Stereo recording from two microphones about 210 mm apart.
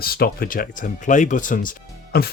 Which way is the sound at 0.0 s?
45° left (ahead or behind).